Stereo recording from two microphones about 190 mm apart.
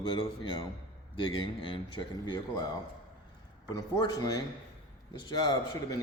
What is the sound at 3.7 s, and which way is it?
Speech, 20° left (ahead or behind).